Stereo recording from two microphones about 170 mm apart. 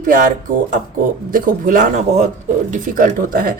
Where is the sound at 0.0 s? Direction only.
50° right (ahead or behind).